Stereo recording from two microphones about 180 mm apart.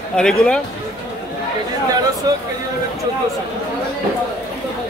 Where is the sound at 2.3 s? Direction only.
20° right (ahead or behind).